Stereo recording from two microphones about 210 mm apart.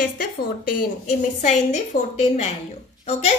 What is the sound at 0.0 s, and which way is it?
A woman's voice, 40° left (ahead or behind).